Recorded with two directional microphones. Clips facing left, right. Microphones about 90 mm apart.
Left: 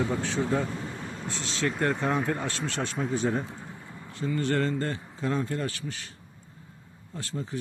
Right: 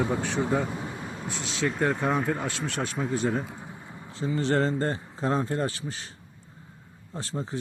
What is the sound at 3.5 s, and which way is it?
A man's voice, 15° right (ahead or behind).